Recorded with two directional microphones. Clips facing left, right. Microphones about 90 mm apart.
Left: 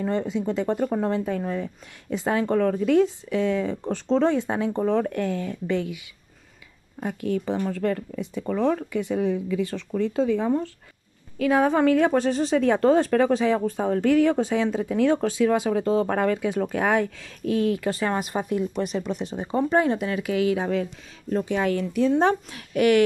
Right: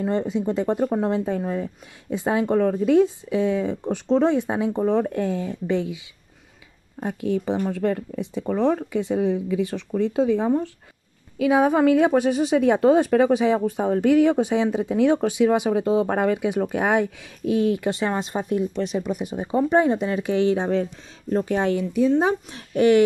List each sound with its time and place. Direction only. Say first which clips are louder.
0.3 s speech: right 2 dB; 25° right (ahead or behind)
7.0 s speech: right 2 dB; 25° right (ahead or behind)
21.7 s speech: right 1 dB; 20° right (ahead or behind)